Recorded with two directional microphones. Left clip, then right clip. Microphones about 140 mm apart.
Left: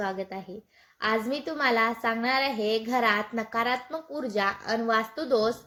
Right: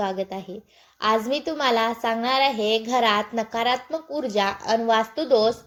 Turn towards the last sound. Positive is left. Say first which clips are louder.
# right 6 dB
turn(degrees=-15)  # may be behind; listen again after turning